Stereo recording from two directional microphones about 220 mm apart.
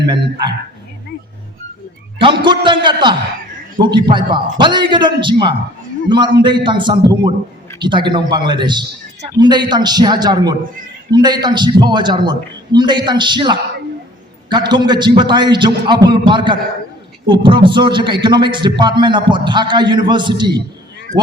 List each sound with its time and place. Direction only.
0.0 s a man's voice: 20° right (ahead or behind)
2.2 s a man's voice: 20° right (ahead or behind)